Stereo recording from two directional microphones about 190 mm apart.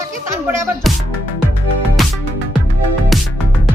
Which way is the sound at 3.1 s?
Centre (ahead or behind).